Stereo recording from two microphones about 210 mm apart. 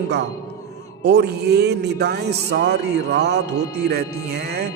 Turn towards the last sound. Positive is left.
turn(degrees=-50)  # may be behind; listen again after turning